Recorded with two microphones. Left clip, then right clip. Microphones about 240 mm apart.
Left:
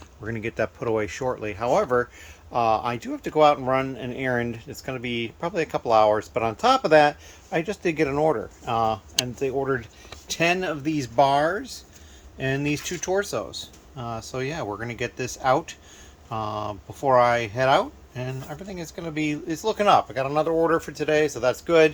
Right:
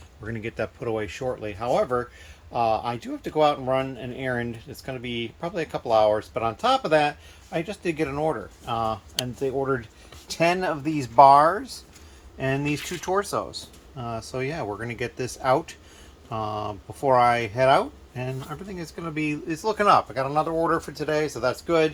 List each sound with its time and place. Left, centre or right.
0.3 s speech: centre